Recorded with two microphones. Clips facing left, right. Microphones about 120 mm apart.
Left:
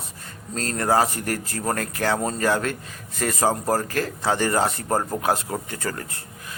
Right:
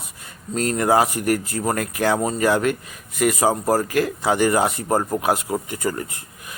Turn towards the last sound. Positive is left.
turn(degrees=-15)  # may be behind; listen again after turning